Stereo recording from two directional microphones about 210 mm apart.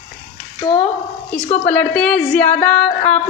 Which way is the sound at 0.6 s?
20° left (ahead or behind).